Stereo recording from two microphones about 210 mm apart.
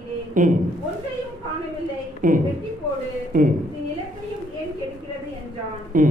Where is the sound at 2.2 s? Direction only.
40° right (ahead or behind).